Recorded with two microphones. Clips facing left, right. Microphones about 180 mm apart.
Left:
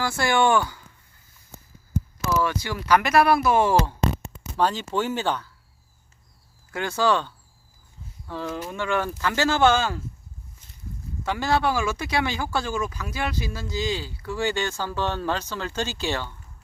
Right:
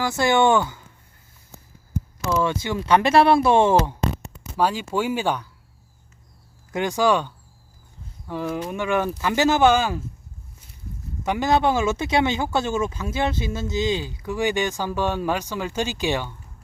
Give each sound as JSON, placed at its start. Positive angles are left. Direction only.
{"t": 0.0, "sound": "speech", "side_deg": -20}
{"t": 2.3, "sound": "speech", "side_deg": -25}
{"t": 4.5, "sound": "speech", "side_deg": -10}
{"t": 6.7, "sound": "speech", "side_deg": -15}
{"t": 11.2, "sound": "speech", "side_deg": -20}